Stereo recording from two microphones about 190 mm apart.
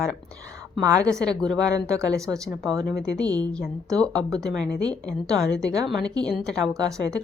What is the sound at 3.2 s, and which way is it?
Speech, 20° right (ahead or behind).